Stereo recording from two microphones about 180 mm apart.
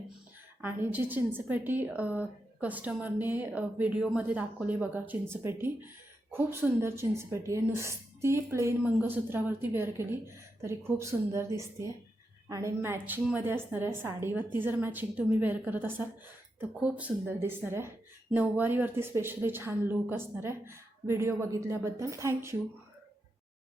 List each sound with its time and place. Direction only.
0.6 s speech: 10° right (ahead or behind)